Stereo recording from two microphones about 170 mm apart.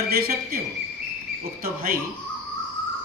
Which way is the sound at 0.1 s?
60° right (ahead or behind).